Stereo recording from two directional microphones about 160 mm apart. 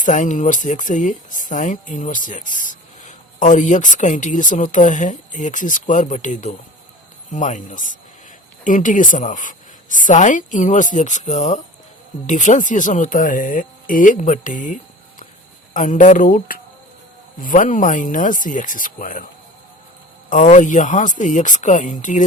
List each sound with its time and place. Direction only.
0.0 s speech: 50° left (ahead or behind)
20.3 s speech: 50° left (ahead or behind)